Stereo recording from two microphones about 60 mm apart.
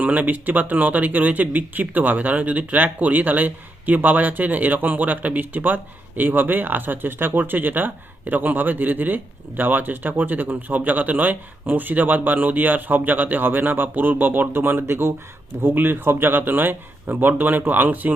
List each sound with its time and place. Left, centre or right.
0.0 s speech: right